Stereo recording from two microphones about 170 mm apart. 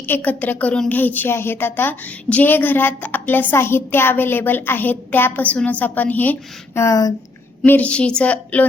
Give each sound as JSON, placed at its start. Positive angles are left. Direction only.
{"t": 0.1, "sound": "a woman's voice", "side_deg": 10}
{"t": 7.6, "sound": "a woman's voice", "side_deg": 10}